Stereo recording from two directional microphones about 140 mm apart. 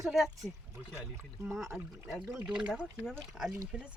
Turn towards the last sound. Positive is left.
turn(degrees=-10)  # may be behind; listen again after turning